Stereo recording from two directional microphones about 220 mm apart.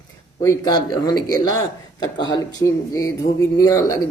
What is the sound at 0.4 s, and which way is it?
A man's voice, 20° left (ahead or behind).